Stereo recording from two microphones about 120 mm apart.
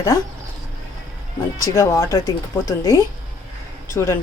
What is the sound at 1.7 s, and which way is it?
Speech, 25° left (ahead or behind).